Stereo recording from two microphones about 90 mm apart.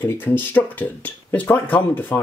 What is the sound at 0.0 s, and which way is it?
Speech, 25° left (ahead or behind).